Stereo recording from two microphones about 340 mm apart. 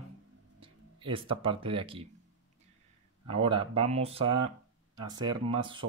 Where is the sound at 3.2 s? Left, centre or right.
Centre.